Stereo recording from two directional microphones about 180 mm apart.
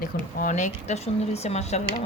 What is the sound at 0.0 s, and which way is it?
Speech, 50° left (ahead or behind).